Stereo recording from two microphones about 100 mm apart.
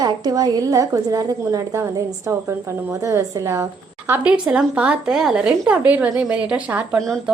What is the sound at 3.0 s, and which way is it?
Speech, 30° right (ahead or behind).